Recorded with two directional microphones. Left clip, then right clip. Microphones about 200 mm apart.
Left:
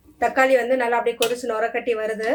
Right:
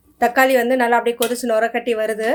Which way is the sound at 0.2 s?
55° right (ahead or behind).